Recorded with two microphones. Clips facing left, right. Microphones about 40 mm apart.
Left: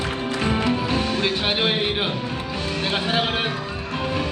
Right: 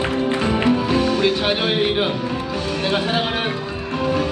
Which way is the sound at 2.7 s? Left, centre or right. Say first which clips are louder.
Right 3 dB; right.